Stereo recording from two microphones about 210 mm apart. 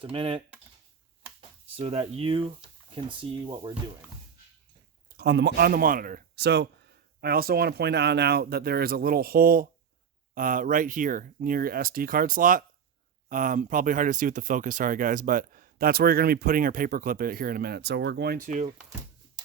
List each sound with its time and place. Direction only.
0.0 s speech: 25° right (ahead or behind)
5.0 s speech: 50° right (ahead or behind)